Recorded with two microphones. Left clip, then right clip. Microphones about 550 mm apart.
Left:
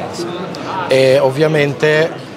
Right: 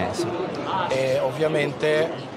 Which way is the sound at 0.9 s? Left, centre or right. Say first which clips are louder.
Left 15 dB; left.